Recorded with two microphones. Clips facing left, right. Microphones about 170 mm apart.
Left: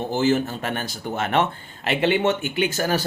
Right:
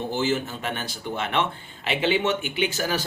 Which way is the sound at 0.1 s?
40° left (ahead or behind).